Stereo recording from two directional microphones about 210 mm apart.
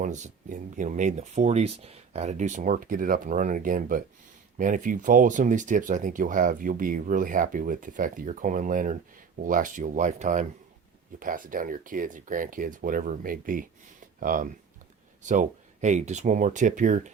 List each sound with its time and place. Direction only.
0.0 s speech: 35° right (ahead or behind)